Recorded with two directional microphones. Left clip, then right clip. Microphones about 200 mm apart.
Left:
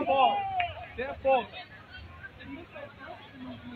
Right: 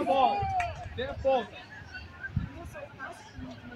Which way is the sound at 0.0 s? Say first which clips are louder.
Left 1 dB; 50° right (ahead or behind).